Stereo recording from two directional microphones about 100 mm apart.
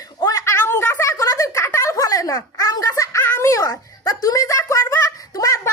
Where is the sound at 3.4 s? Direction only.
35° left (ahead or behind).